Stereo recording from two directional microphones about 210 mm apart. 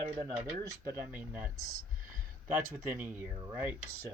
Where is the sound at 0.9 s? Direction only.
10° right (ahead or behind).